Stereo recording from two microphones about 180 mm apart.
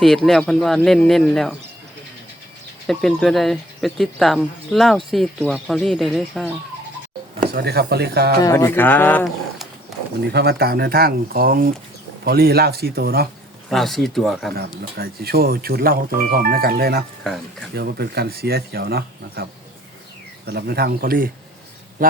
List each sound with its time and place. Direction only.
0.0 s speech: centre (ahead or behind)
2.8 s speech: centre (ahead or behind)
7.5 s speech: 65° right (ahead or behind)
8.4 s speech: 20° left (ahead or behind)
10.2 s speech: 65° right (ahead or behind)
13.7 s speech: centre (ahead or behind)
14.9 s speech: 55° right (ahead or behind)